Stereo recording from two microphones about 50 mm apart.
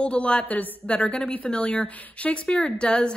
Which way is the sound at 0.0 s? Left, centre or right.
Left.